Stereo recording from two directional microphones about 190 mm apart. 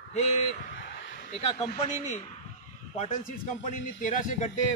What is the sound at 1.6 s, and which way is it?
Speech, 35° left (ahead or behind).